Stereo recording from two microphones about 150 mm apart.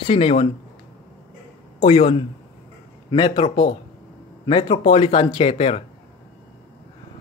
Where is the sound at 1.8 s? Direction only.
40° left (ahead or behind).